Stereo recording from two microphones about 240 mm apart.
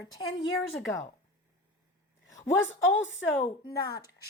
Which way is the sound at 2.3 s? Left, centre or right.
Left.